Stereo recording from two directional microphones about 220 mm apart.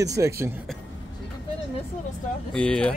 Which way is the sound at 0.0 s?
15° right (ahead or behind).